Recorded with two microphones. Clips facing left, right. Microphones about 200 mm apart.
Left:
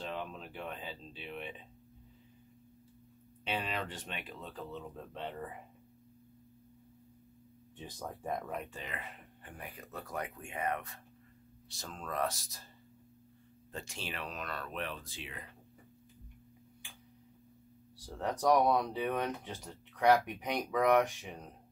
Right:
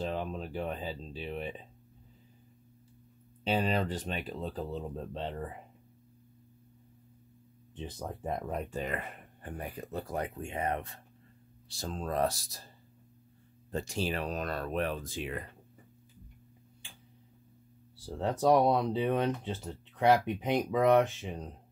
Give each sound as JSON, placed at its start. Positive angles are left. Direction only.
{"t": 0.0, "sound": "speech", "side_deg": -40}
{"t": 3.4, "sound": "speech", "side_deg": -35}
{"t": 7.7, "sound": "speech", "side_deg": -20}
{"t": 8.5, "sound": "speech", "side_deg": -35}
{"t": 13.7, "sound": "speech", "side_deg": -40}
{"t": 18.0, "sound": "speech", "side_deg": -25}